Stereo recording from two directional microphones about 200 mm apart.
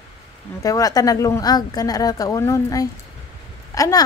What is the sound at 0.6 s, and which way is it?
A woman's voice, 20° left (ahead or behind).